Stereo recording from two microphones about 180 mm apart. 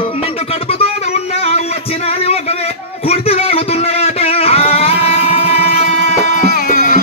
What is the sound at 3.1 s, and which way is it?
Music, 35° left (ahead or behind).